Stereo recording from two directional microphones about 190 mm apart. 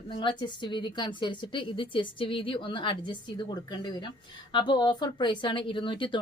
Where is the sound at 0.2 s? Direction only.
20° left (ahead or behind).